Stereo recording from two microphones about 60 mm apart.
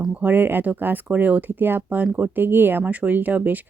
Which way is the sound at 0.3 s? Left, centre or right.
Right.